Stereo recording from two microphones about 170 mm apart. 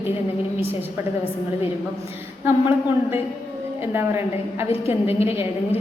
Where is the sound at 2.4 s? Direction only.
15° right (ahead or behind).